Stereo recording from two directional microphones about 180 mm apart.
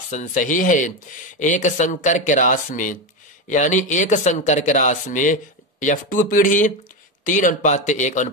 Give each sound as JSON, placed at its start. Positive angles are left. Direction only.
{"t": 0.1, "sound": "speech", "side_deg": 45}